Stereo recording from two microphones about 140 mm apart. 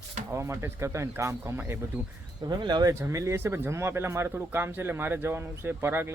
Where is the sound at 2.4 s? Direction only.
30° right (ahead or behind).